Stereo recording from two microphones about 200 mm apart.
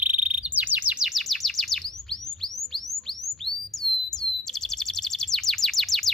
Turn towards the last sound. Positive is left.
turn(degrees=0)  # may be behind; listen again after turning